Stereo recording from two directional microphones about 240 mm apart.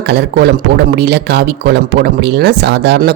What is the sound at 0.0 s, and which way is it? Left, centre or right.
Speech, right.